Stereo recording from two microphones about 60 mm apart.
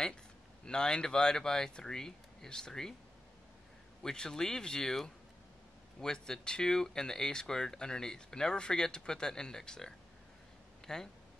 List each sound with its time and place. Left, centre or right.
0.7 s speech: centre
4.0 s speech: centre